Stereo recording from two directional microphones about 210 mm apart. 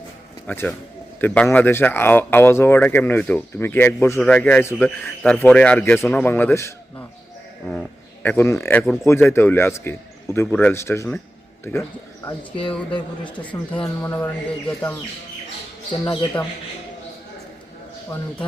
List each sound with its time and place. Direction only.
0.4 s a man's voice: 10° left (ahead or behind)
16.0 s a man's voice: 5° left (ahead or behind)